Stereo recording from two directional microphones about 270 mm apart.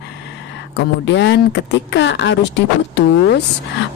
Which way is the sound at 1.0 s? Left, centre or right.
Left.